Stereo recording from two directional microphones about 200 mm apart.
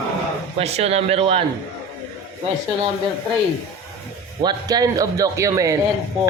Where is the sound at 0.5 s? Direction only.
30° right (ahead or behind).